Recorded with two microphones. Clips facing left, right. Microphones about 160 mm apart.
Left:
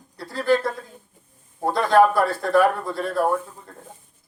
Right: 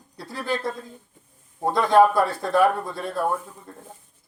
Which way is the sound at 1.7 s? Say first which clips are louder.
Even; 20° right (ahead or behind).